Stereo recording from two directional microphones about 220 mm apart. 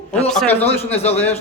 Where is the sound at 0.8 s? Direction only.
30° left (ahead or behind).